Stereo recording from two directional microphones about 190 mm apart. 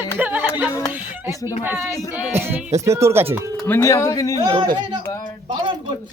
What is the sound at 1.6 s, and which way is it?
Speech, 10° right (ahead or behind).